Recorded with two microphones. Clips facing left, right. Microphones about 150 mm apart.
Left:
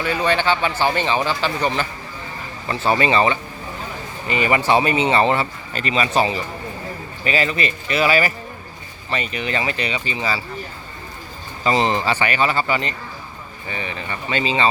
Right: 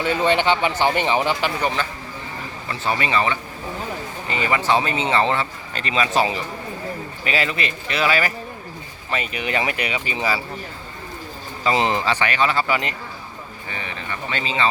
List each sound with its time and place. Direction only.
0.0 s a man's voice: 20° right (ahead or behind)
2.6 s speech: 35° left (ahead or behind)
4.3 s speech: 15° left (ahead or behind)
9.0 s speech: 5° right (ahead or behind)
11.6 s speech: 5° right (ahead or behind)
13.7 s speech: 15° left (ahead or behind)